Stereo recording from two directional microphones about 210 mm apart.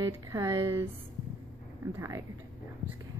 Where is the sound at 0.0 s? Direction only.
15° right (ahead or behind).